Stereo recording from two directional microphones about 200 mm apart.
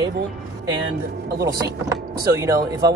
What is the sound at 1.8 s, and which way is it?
Speech, 15° right (ahead or behind).